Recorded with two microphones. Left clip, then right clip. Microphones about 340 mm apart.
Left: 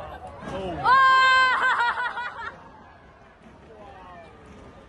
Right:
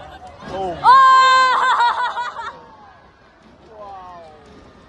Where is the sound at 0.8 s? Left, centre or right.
Centre.